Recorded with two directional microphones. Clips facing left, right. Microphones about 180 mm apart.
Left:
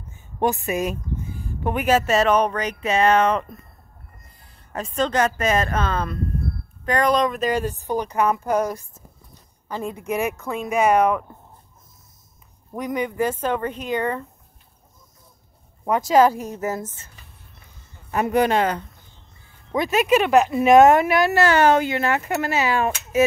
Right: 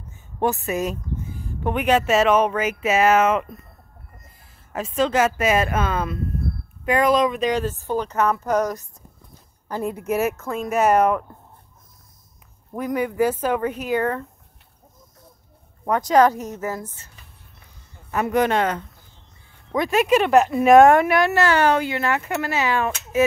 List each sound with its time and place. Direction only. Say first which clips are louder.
0.4 s speech: even; 15° left (ahead or behind)
1.6 s speech: even; 5° left (ahead or behind)
4.7 s speech: right 2 dB; 5° right (ahead or behind)
7.6 s speech: even; 15° left (ahead or behind)
9.7 s speech: right 2 dB; 10° right (ahead or behind)
12.7 s speech: right 2 dB; 5° right (ahead or behind)
15.8 s speech: even; 5° left (ahead or behind); by 17.1 s 20° left (ahead or behind)
18.2 s speech: left 1 dB; 10° left (ahead or behind)
20.2 s speech: even; 15° left (ahead or behind)
22.1 s speech: left 1 dB; 35° left (ahead or behind)